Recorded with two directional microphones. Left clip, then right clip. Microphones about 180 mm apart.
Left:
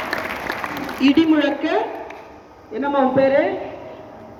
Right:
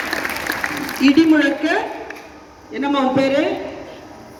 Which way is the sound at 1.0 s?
40° right (ahead or behind).